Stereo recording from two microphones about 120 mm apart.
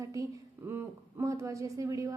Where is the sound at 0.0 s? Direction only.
25° right (ahead or behind).